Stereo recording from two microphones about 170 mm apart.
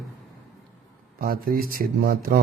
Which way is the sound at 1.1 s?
60° right (ahead or behind).